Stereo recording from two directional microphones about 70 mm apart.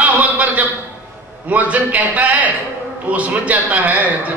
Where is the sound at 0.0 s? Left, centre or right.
Right.